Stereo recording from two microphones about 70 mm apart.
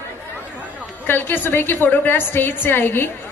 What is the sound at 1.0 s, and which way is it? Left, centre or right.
A woman's voice, left.